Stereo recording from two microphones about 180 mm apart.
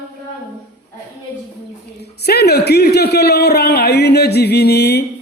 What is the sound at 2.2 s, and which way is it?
A man's voice, 65° left (ahead or behind).